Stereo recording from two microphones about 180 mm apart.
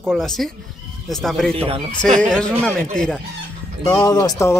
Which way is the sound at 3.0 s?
5° left (ahead or behind).